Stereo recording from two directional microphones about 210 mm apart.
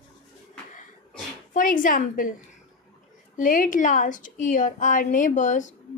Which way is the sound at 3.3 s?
40° left (ahead or behind).